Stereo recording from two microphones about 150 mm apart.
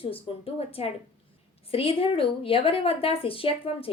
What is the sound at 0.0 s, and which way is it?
A woman's voice, 40° left (ahead or behind).